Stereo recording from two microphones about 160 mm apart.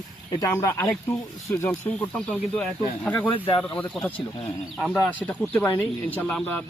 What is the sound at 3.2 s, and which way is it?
Speech, 35° left (ahead or behind).